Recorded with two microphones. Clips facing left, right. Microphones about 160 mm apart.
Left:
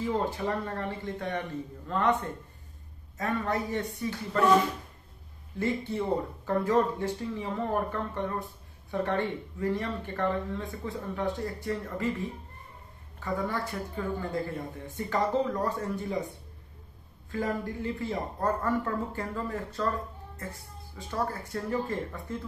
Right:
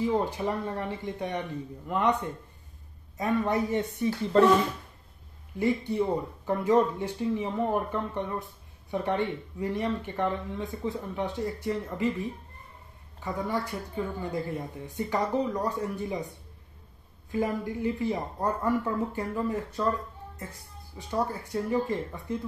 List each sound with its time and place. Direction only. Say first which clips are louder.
0.0 s speech: right 2 dB; 20° right (ahead or behind)
3.2 s speech: right 4 dB; 20° right (ahead or behind)
5.6 s speech: right 3 dB; 15° right (ahead or behind)
17.3 s speech: right 2 dB; 15° right (ahead or behind)
21.1 s speech: right 3 dB; 15° right (ahead or behind)